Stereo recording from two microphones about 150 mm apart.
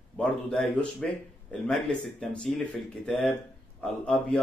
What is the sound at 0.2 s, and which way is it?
Speech, 10° left (ahead or behind).